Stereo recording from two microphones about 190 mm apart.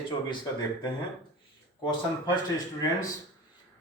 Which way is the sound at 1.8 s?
20° left (ahead or behind).